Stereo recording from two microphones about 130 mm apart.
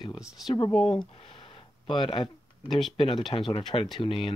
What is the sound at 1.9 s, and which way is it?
Speech, 40° left (ahead or behind).